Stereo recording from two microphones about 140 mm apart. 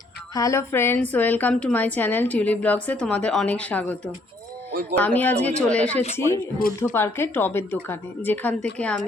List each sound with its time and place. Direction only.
0.3 s a woman's voice: 20° left (ahead or behind)
4.7 s speech: 90° right
4.9 s a woman's voice: 10° left (ahead or behind)
6.6 s speech: 90° left
6.9 s a woman's voice: 15° left (ahead or behind)